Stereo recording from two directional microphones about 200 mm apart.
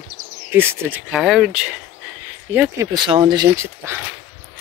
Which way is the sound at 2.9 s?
20° right (ahead or behind).